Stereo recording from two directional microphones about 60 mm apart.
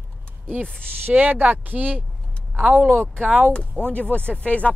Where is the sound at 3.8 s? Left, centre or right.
Left.